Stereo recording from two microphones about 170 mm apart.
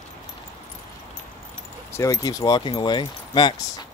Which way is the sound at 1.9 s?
20° left (ahead or behind).